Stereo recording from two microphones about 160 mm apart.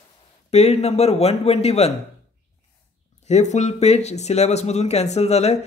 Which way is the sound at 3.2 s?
45° left (ahead or behind).